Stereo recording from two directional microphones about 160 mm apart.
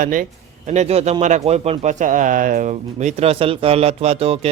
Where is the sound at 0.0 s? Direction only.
55° right (ahead or behind).